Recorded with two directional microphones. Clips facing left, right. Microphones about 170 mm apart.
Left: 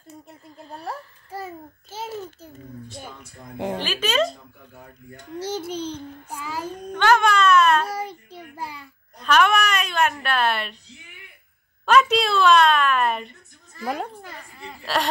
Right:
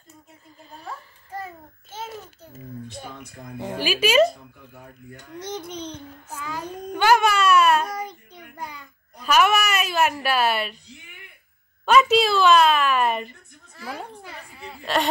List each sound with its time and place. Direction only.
0.6 s a sound: 75° left (ahead or behind)
3.7 s speech: 10° right (ahead or behind)
5.8 s child singing: 10° left (ahead or behind)
6.9 s baby cry: 10° right (ahead or behind)
7.9 s child singing: 30° left (ahead or behind)
9.2 s a sound: 5° right (ahead or behind)
11.8 s a woman's voice: centre (ahead or behind)
14.2 s whimper: 5° right (ahead or behind)